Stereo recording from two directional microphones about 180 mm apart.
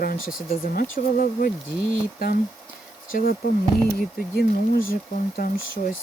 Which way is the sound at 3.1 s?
55° left (ahead or behind).